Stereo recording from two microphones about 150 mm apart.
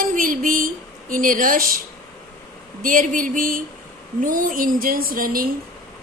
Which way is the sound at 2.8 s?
60° right (ahead or behind).